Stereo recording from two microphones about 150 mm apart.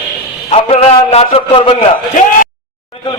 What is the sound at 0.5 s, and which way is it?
A man's voice, 40° left (ahead or behind).